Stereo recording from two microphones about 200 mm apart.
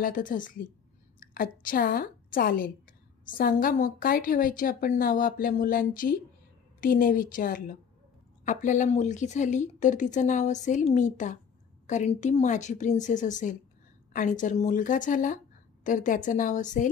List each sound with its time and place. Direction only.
0.0 s a woman's voice: 45° left (ahead or behind)